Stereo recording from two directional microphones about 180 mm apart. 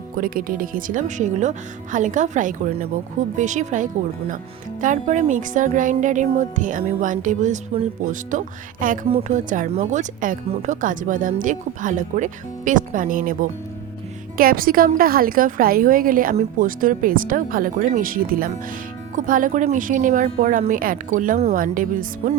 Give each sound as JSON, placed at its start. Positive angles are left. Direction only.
{"t": 0.2, "sound": "speech", "side_deg": -50}